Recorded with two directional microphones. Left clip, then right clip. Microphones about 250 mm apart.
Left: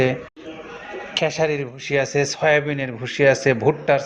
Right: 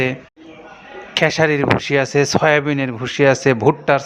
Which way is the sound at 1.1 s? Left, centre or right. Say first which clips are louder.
Right 5 dB; right.